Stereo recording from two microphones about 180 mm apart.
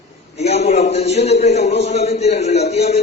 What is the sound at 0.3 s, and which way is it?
A man's voice, 35° left (ahead or behind).